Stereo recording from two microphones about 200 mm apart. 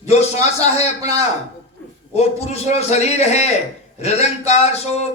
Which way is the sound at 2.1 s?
35° left (ahead or behind).